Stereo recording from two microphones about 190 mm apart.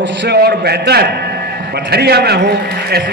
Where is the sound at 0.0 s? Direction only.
70° right (ahead or behind).